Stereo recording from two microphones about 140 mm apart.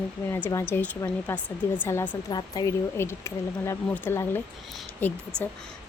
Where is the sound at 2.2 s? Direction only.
25° left (ahead or behind).